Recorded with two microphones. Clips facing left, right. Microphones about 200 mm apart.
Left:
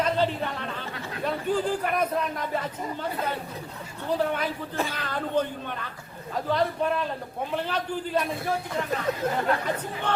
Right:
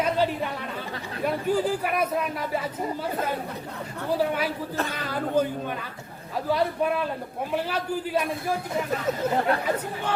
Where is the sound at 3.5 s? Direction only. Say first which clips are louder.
Right 3 dB; 65° right (ahead or behind).